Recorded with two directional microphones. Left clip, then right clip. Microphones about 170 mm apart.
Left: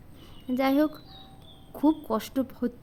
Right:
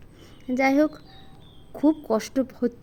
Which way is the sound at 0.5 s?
10° right (ahead or behind).